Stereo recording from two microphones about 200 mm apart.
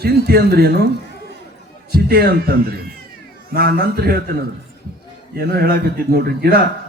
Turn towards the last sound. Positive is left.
turn(degrees=-50)  # may be behind; listen again after turning